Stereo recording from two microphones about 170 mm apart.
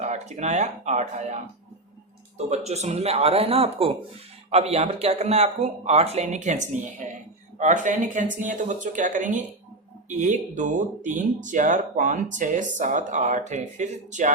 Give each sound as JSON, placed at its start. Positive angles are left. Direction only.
{"t": 0.0, "sound": "speech", "side_deg": -40}
{"t": 2.5, "sound": "a man's voice", "side_deg": -40}